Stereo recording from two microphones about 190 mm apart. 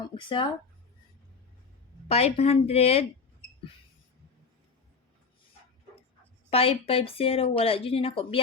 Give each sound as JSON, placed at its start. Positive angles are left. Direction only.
{"t": 0.1, "sound": "speech", "side_deg": 25}
{"t": 2.0, "sound": "a woman's voice", "side_deg": 35}
{"t": 6.5, "sound": "speech", "side_deg": 30}